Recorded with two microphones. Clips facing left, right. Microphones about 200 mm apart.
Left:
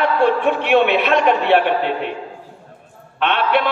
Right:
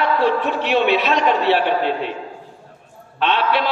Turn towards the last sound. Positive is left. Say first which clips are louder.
# left 1 dB
turn(degrees=55)  # may be behind; listen again after turning